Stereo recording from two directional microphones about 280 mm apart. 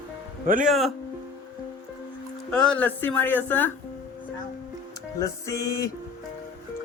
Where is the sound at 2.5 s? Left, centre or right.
Centre.